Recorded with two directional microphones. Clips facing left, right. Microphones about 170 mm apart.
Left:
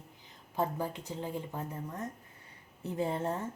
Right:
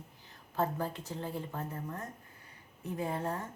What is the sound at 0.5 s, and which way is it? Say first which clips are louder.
A woman's voice: even; 15° left (ahead or behind).